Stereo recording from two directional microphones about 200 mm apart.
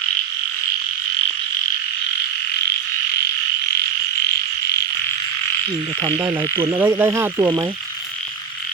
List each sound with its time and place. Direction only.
6.0 s speech: 20° right (ahead or behind)
6.7 s frog: 10° right (ahead or behind)